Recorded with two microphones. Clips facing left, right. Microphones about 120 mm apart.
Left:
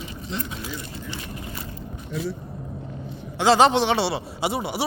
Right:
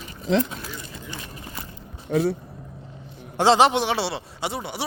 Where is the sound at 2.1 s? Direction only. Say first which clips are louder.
Right 8 dB; 75° right (ahead or behind).